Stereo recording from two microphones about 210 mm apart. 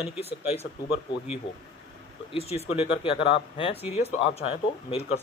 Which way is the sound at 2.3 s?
30° left (ahead or behind).